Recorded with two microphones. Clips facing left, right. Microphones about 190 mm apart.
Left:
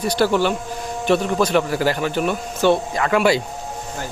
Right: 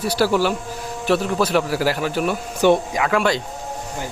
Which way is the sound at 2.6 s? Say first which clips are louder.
Right 1 dB; 15° right (ahead or behind).